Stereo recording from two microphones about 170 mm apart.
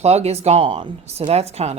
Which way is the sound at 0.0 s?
40° right (ahead or behind).